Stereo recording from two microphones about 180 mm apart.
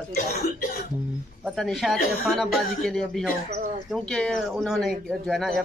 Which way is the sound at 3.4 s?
40° right (ahead or behind).